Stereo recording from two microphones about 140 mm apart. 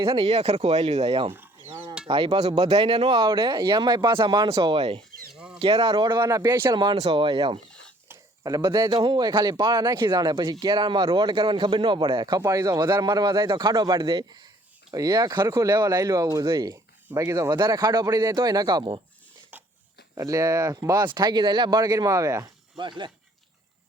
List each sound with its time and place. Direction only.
0.0 s speech: 40° right (ahead or behind)
1.7 s a sound: 35° right (ahead or behind)
2.0 s speech: 40° right (ahead or behind)
5.3 s chicken: 5° right (ahead or behind)
5.5 s speech: 40° right (ahead or behind)
6.2 s speech: 20° right (ahead or behind)
6.9 s speech: 45° right (ahead or behind)
8.0 s speech: 20° right (ahead or behind)
12.4 s speech: 25° right (ahead or behind)
20.1 s speech: 25° right (ahead or behind)